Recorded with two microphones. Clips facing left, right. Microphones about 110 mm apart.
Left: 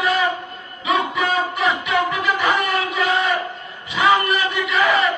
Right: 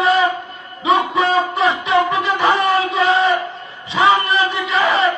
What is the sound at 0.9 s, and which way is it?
Music, 30° right (ahead or behind).